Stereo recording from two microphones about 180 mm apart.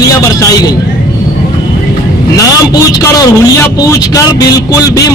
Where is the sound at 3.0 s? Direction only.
20° left (ahead or behind).